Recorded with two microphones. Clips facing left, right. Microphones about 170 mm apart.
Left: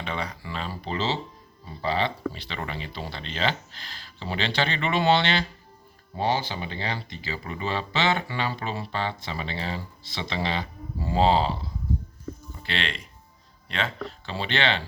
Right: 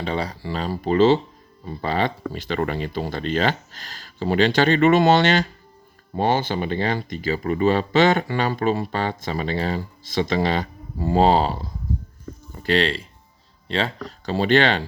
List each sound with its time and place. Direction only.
0.0 s speech: 35° right (ahead or behind)